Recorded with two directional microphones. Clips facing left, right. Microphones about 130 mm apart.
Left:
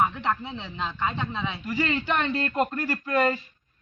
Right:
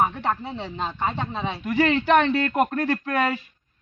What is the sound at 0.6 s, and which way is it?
Speech, 45° right (ahead or behind).